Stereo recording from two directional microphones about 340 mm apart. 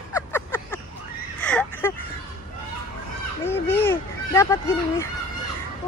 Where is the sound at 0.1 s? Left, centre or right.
Centre.